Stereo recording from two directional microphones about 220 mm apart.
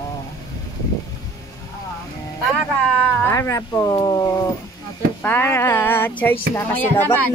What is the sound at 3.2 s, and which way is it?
Speech, 10° left (ahead or behind).